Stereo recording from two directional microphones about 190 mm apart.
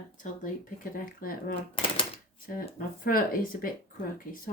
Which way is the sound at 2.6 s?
50° left (ahead or behind).